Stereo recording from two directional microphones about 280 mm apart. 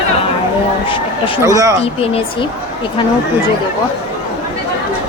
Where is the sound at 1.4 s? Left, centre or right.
Centre.